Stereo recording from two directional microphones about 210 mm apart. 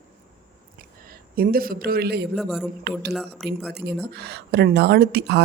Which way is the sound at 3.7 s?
50° right (ahead or behind).